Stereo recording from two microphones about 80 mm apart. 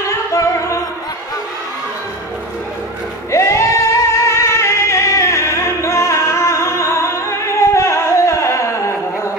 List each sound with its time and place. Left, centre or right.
0.0 s music: left
3.3 s singing: left